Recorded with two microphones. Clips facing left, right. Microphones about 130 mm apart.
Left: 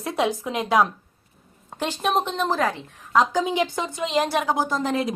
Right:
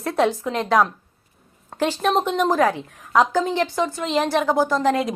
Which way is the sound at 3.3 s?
10° left (ahead or behind).